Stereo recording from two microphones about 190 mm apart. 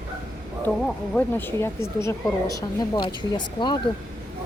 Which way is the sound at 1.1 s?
10° left (ahead or behind).